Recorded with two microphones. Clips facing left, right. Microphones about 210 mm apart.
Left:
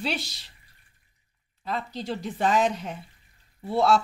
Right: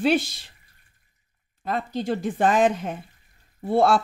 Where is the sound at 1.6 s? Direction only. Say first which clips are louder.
Right 5 dB; 50° right (ahead or behind).